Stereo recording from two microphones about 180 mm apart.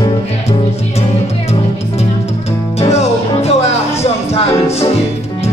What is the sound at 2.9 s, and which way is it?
Music, 35° left (ahead or behind).